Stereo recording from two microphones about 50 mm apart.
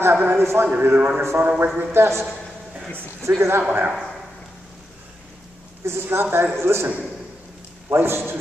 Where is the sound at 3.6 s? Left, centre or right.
Right.